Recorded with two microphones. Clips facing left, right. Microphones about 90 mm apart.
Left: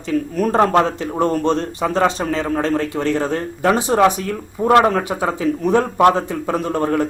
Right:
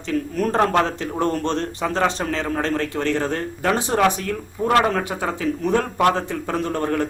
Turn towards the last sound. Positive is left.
turn(degrees=15)  # may be behind; listen again after turning